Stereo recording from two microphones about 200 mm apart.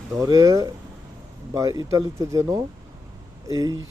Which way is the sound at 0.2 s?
20° right (ahead or behind).